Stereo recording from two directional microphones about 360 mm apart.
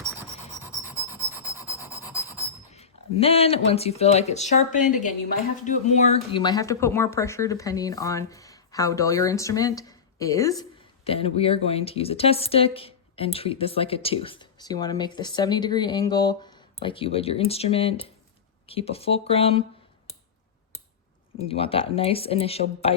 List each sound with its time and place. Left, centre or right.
0.6 s rub: centre
2.4 s speech: centre
21.4 s speech: centre